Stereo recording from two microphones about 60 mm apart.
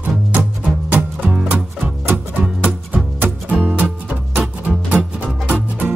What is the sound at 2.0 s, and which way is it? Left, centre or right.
Music, right.